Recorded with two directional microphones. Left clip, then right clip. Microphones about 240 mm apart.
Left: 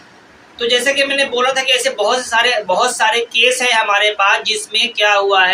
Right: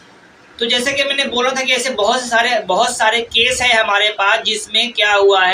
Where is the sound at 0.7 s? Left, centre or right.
Centre.